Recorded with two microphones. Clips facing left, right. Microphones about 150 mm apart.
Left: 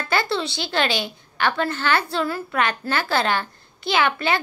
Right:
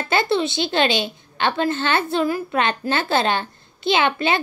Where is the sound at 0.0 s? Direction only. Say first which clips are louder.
Right 3 dB; 20° right (ahead or behind).